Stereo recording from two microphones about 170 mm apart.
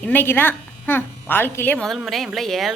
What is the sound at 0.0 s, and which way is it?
Speech, 10° left (ahead or behind).